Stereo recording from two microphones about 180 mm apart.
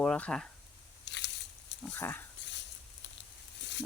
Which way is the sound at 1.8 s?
10° left (ahead or behind).